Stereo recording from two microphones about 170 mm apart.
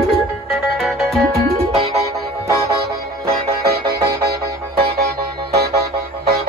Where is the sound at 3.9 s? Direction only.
65° right (ahead or behind).